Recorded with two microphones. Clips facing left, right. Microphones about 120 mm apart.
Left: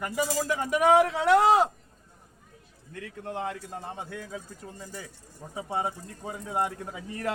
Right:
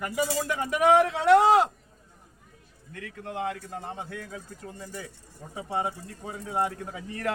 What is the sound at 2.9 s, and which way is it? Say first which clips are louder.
Speech: left 1 dB; 20° left (ahead or behind).